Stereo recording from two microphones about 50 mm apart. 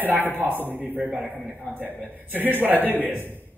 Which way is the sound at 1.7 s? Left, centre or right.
Right.